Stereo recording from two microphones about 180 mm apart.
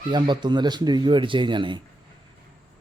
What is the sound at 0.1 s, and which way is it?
Speech, 25° right (ahead or behind).